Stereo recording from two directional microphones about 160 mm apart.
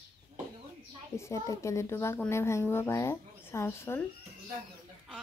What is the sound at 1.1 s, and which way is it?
A woman's voice, 20° left (ahead or behind).